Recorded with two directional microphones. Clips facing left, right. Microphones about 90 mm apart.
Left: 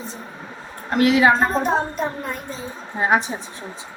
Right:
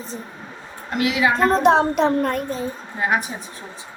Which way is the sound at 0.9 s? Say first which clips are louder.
Left 4 dB; 40° left (ahead or behind).